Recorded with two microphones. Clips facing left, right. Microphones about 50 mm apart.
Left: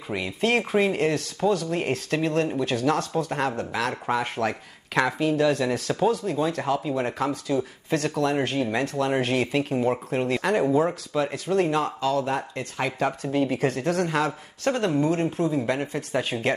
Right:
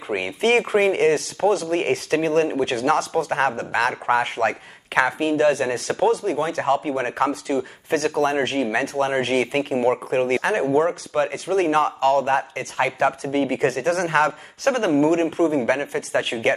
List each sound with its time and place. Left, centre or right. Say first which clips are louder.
0.1 s speech: right 5 dB; right